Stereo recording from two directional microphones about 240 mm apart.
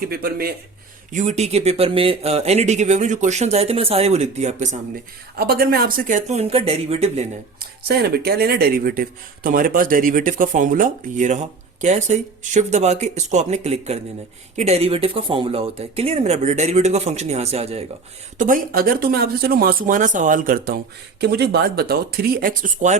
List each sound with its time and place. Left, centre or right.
0.0 s speech: right
7.6 s speech: right